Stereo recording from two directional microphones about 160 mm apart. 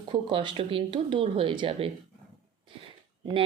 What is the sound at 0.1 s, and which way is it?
Speech, 30° right (ahead or behind).